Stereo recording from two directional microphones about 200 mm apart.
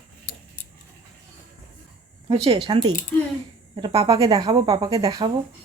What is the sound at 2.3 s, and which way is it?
Speech, 25° right (ahead or behind).